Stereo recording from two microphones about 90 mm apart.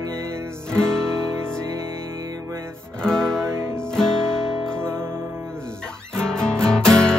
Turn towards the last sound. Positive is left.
turn(degrees=5)  # may be behind; listen again after turning